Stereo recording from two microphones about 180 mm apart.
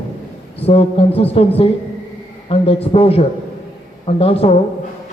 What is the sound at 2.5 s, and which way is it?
A man's voice, 30° left (ahead or behind).